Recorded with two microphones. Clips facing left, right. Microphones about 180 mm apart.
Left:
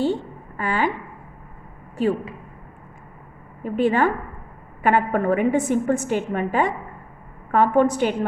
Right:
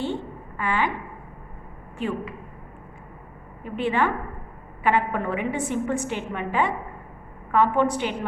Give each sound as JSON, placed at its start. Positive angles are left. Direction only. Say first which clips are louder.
{"t": 0.0, "sound": "a sound", "louder": "left 6 dB", "side_deg": 40}
{"t": 2.0, "sound": "a woman's voice", "louder": "left 6 dB", "side_deg": 35}
{"t": 3.6, "sound": "a woman's voice", "louder": "left 5 dB", "side_deg": 40}